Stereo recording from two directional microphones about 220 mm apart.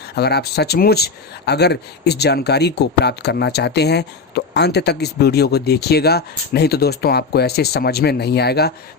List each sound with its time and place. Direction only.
0.2 s speech: 45° left (ahead or behind)